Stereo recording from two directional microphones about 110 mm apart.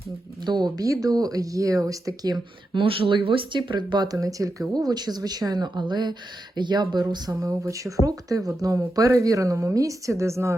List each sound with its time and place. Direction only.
0.4 s speech: 40° right (ahead or behind)
2.8 s speech: 55° right (ahead or behind)
7.1 s a woman's voice: 30° right (ahead or behind)